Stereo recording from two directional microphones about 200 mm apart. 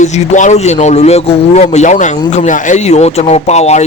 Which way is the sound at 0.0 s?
35° left (ahead or behind).